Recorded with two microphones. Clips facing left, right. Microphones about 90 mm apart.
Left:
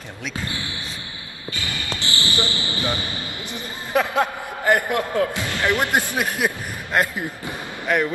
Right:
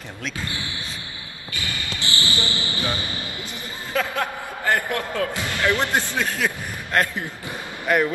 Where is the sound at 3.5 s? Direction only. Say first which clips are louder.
Left 4 dB; 20° left (ahead or behind).